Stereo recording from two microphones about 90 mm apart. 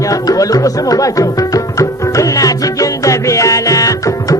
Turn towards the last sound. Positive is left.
turn(degrees=40)  # may be behind; listen again after turning